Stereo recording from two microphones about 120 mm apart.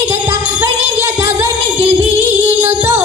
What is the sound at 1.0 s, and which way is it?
Music, 20° right (ahead or behind).